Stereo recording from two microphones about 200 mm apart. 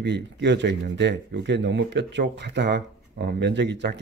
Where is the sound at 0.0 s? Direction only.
60° right (ahead or behind).